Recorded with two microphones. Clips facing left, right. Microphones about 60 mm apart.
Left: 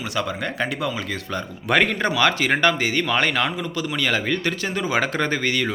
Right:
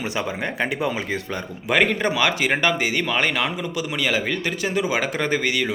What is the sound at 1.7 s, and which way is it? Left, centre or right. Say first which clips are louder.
A man's voice: even; centre.